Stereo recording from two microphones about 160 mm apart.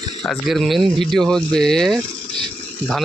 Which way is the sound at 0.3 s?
Centre (ahead or behind).